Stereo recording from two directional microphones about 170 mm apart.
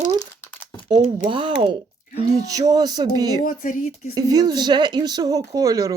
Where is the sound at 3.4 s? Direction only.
50° left (ahead or behind).